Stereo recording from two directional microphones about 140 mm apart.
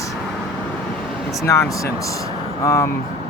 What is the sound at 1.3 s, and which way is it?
Speech, 20° left (ahead or behind).